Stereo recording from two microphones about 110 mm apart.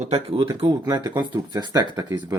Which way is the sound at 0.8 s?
25° right (ahead or behind).